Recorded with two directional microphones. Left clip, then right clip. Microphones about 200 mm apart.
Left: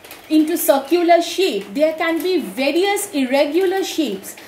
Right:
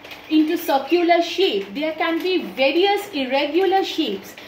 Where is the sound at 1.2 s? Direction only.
60° left (ahead or behind).